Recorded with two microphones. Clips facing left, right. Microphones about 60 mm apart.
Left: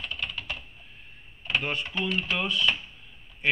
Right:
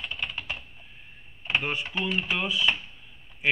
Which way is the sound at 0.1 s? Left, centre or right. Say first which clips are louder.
Right 1 dB; centre.